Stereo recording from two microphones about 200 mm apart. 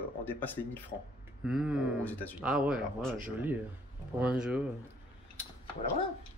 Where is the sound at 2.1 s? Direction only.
10° left (ahead or behind).